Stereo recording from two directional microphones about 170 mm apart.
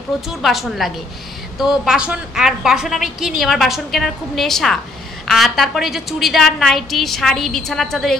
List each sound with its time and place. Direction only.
0.3 s a woman's voice: centre (ahead or behind)